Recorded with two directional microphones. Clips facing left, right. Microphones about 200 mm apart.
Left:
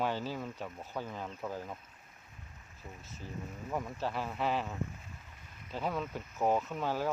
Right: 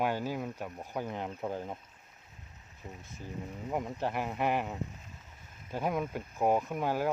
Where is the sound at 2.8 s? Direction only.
15° right (ahead or behind).